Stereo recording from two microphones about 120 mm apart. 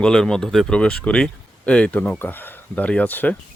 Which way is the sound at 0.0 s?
5° left (ahead or behind).